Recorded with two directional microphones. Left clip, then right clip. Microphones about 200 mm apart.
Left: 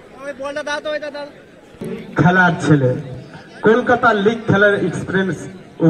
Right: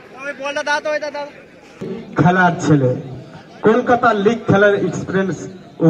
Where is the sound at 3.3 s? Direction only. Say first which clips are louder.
Left 1 dB; 10° right (ahead or behind).